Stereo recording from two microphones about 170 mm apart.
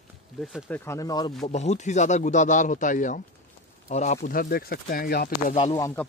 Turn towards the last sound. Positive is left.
turn(degrees=20)  # may be behind; listen again after turning